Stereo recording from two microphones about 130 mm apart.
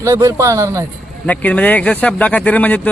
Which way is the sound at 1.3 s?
10° left (ahead or behind).